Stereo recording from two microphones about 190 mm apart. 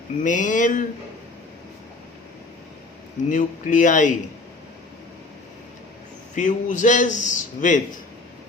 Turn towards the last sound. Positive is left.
turn(degrees=40)  # may be behind; listen again after turning